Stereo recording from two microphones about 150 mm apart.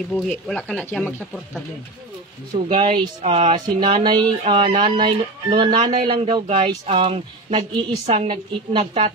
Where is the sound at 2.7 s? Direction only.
35° right (ahead or behind).